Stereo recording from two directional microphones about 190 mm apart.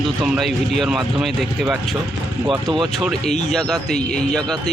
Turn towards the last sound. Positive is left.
turn(degrees=5)  # may be behind; listen again after turning